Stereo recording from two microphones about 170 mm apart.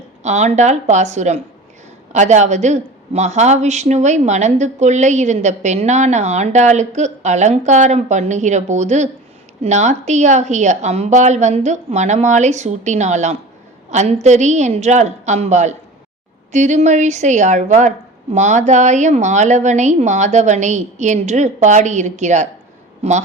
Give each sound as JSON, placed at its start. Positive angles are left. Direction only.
{"t": 0.2, "sound": "a man's voice", "side_deg": -40}